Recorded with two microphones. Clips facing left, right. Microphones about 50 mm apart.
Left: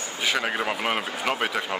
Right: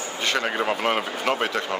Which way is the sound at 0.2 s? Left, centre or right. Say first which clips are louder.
Right 1 dB; centre.